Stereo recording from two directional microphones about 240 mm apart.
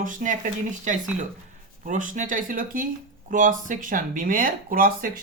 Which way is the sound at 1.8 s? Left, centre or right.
Right.